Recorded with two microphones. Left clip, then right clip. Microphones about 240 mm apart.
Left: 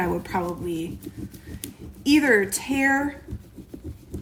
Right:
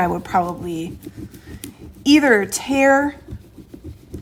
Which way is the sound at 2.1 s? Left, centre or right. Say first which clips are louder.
Right 5 dB; right.